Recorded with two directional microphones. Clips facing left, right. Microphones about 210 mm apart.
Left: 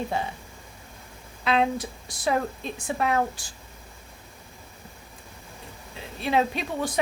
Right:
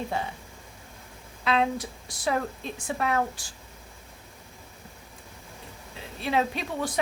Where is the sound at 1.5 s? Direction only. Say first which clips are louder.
Left 2 dB; 20° left (ahead or behind).